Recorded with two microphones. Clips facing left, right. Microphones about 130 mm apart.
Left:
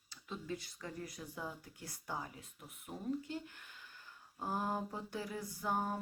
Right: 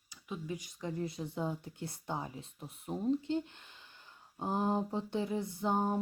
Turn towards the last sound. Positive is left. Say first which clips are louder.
# right 5 dB
turn(degrees=-25)  # may be behind; listen again after turning